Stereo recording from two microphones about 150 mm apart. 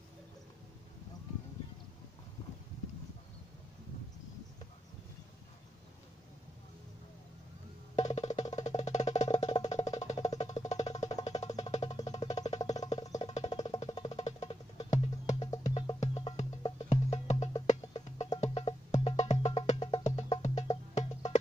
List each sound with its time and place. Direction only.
7.9 s music: 50° left (ahead or behind)
14.2 s music: 50° left (ahead or behind)